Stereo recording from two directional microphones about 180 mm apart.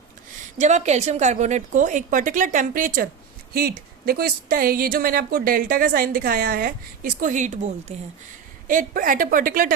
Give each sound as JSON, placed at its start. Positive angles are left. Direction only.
{"t": 0.6, "sound": "a woman's voice", "side_deg": -40}